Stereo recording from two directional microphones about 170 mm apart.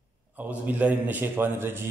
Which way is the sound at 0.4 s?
10° right (ahead or behind).